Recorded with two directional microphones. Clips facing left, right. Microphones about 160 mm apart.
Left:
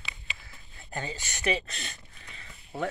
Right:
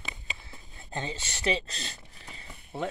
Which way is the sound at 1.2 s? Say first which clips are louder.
Even; 25° right (ahead or behind).